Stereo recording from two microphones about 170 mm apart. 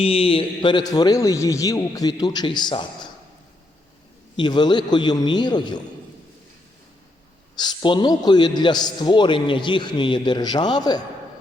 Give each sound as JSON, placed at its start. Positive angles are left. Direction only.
{"t": 0.0, "sound": "a man's voice", "side_deg": 35}
{"t": 4.4, "sound": "a man's voice", "side_deg": 25}
{"t": 7.6, "sound": "a man's voice", "side_deg": 25}